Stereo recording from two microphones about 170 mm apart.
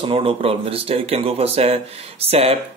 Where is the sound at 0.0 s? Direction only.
35° right (ahead or behind).